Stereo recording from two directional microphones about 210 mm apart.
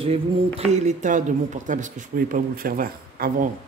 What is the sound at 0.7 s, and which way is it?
Speech, 35° right (ahead or behind).